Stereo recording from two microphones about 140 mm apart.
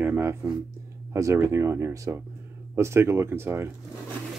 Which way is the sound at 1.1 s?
20° right (ahead or behind).